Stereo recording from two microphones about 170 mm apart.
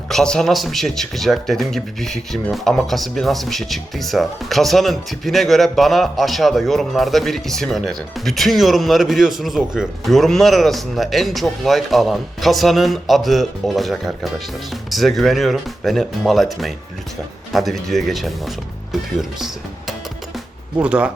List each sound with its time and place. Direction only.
0.1 s speech: 5° left (ahead or behind)
20.8 s speech: 5° right (ahead or behind)